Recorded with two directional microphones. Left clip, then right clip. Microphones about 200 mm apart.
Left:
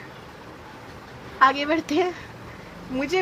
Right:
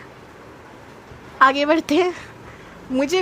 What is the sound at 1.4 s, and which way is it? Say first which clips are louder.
Speech: right 4 dB; 60° right (ahead or behind).